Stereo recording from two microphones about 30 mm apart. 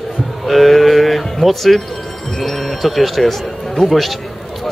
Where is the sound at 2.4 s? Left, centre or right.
Centre.